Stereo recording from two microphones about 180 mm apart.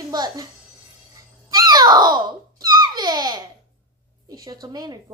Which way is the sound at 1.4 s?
20° right (ahead or behind).